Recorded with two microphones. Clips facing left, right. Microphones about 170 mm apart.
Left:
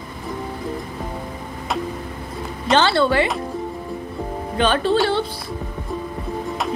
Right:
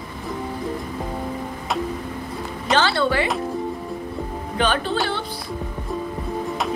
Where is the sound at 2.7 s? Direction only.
25° left (ahead or behind).